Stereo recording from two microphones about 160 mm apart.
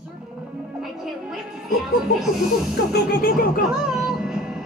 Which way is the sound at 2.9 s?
65° left (ahead or behind).